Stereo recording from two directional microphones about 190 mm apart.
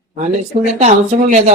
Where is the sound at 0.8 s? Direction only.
35° right (ahead or behind).